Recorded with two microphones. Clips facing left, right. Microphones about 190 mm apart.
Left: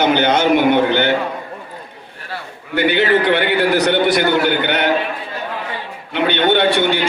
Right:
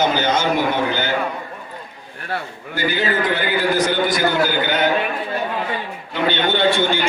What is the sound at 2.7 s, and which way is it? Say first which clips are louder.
A man's voice: left 6 dB; 65° left (ahead or behind).